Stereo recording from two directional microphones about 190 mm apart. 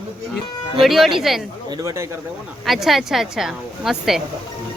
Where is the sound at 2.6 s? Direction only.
Centre (ahead or behind).